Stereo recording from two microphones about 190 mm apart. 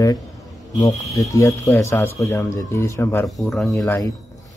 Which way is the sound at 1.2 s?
15° left (ahead or behind).